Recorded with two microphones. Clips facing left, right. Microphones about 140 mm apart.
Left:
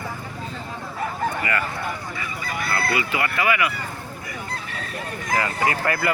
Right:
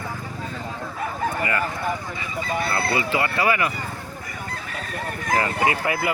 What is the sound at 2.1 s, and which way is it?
Speech, 25° right (ahead or behind).